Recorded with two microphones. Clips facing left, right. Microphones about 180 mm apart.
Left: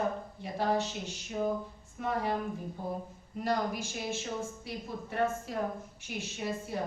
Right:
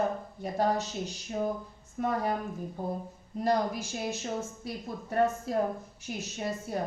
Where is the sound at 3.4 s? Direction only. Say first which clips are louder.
Right 4 dB; 40° right (ahead or behind).